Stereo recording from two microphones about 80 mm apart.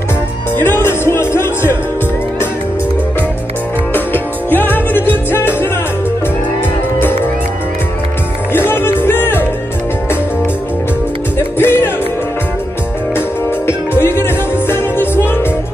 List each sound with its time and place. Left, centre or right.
0.6 s music: left
3.9 s music: left
8.5 s music: left
11.5 s music: left
14.0 s music: left